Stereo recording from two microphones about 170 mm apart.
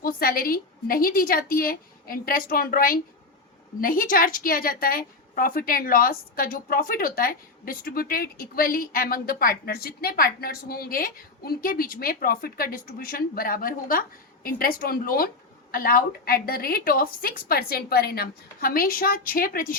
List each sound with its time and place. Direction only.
0.0 s a woman's voice: 60° left (ahead or behind)